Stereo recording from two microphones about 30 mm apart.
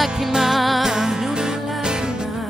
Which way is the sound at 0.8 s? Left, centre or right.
Centre.